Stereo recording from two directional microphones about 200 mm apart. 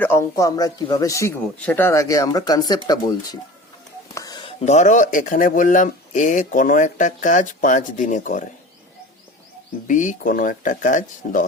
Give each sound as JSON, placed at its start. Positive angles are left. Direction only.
{"t": 0.0, "sound": "speech", "side_deg": 15}
{"t": 9.8, "sound": "speech", "side_deg": 40}